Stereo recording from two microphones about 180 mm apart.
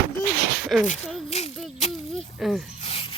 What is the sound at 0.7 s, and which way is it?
Speech, centre (ahead or behind).